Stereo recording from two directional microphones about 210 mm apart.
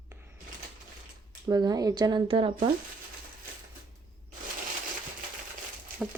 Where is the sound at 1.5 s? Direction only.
20° right (ahead or behind).